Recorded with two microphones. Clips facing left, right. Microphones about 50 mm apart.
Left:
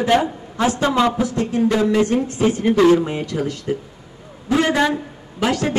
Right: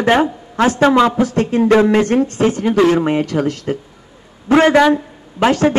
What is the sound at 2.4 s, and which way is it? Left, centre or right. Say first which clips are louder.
A man's voice: left 1 dB; right.